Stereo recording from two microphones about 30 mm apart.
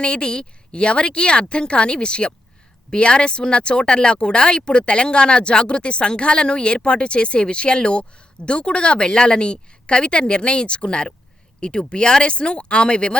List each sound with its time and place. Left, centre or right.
0.0 s speech: left